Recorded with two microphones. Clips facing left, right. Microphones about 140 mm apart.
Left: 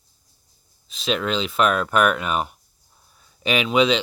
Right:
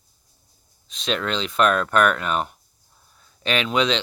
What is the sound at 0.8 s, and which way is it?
Speech, 5° left (ahead or behind).